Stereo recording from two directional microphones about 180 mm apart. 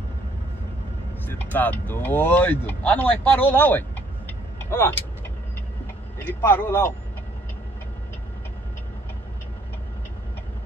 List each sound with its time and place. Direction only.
1.2 s speech: 10° left (ahead or behind)
4.6 s vehicle: 15° left (ahead or behind)
6.1 s speech: 10° left (ahead or behind)